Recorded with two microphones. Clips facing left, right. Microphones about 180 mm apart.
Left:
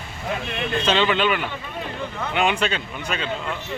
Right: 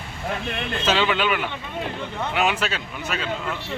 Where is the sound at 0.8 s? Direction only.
5° right (ahead or behind).